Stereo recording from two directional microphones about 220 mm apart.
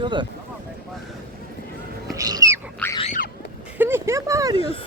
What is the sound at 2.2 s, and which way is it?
Duck, 15° right (ahead or behind).